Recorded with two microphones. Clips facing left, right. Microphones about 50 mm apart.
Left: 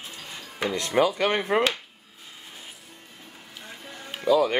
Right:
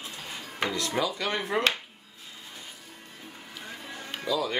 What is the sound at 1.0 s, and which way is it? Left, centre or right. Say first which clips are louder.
Speech: left 9 dB; left.